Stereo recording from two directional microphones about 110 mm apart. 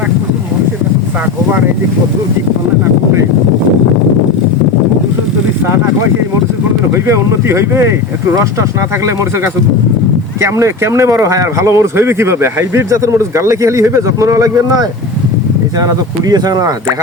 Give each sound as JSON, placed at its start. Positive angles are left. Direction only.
{"t": 7.4, "sound": "speech", "side_deg": -25}
{"t": 10.4, "sound": "speech", "side_deg": -25}